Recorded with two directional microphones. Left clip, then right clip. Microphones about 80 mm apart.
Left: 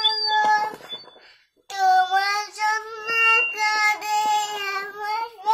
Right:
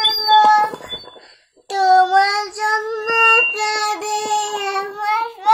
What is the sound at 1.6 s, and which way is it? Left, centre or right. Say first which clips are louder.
Child singing: right 6 dB; right.